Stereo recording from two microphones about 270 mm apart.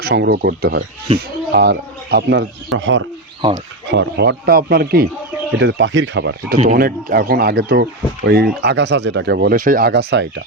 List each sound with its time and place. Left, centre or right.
0.0 s speech: right
1.1 s speech: centre
1.5 s speech: right
6.6 s speech: right